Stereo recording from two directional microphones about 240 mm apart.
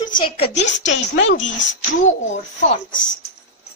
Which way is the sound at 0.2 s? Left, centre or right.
Left.